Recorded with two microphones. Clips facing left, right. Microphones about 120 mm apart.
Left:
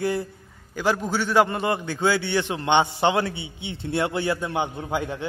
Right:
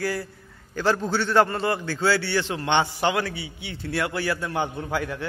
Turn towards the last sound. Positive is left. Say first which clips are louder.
# left 1 dB
turn(degrees=20)  # may be behind; listen again after turning